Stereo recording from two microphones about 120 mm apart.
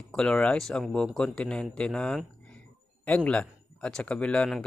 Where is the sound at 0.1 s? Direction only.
5° left (ahead or behind).